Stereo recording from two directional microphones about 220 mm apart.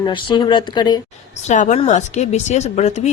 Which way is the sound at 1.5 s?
35° left (ahead or behind).